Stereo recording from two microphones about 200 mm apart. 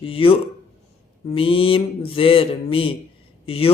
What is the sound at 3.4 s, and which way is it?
Speech, 30° left (ahead or behind).